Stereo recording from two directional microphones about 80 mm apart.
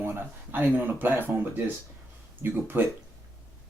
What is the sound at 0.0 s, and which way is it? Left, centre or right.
Speech, right.